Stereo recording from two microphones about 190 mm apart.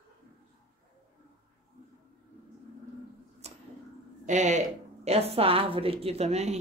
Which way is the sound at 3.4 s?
35° right (ahead or behind).